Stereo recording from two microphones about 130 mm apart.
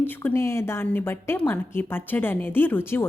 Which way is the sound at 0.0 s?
15° left (ahead or behind).